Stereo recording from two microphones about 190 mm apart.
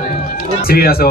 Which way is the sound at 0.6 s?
55° left (ahead or behind).